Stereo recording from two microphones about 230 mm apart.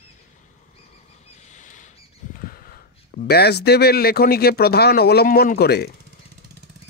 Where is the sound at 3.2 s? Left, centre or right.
Left.